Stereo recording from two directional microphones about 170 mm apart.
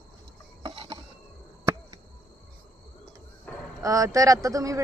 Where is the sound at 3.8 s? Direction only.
20° right (ahead or behind).